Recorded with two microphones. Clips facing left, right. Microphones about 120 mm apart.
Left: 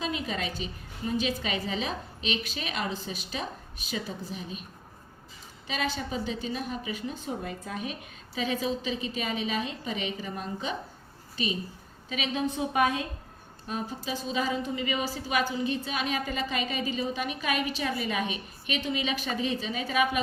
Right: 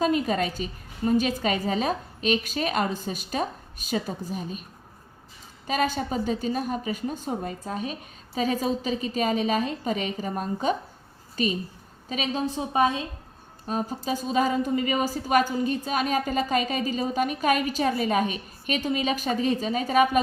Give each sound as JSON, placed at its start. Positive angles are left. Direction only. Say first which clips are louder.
{"t": 0.0, "sound": "a woman's voice", "louder": "right 8 dB", "side_deg": -45}
{"t": 5.6, "sound": "a woman's voice", "louder": "right 6 dB", "side_deg": -45}
{"t": 13.7, "sound": "a woman's voice", "louder": "right 6 dB", "side_deg": -40}